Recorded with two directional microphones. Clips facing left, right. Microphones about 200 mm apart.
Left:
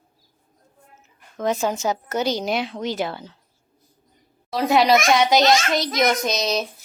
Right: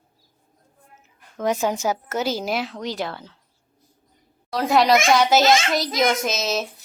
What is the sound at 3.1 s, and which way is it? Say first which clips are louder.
Speech: left 2 dB; 25° left (ahead or behind).